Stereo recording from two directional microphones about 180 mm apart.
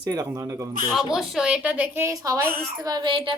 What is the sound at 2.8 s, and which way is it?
Child singing, 25° right (ahead or behind).